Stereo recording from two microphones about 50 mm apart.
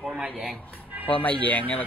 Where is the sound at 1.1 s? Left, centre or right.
Left.